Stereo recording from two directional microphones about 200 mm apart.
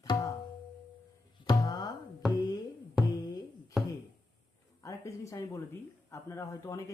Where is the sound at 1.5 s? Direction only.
20° left (ahead or behind).